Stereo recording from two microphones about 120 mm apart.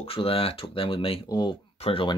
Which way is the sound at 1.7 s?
55° left (ahead or behind).